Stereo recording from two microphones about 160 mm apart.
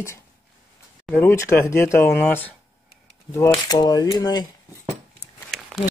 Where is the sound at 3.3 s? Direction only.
25° left (ahead or behind).